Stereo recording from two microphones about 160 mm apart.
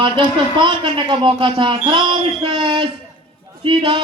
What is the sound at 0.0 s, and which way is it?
A man's voice, 30° right (ahead or behind).